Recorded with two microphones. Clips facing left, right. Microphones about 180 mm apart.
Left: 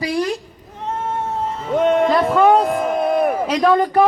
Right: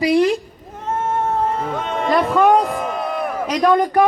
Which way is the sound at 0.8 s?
50° right (ahead or behind).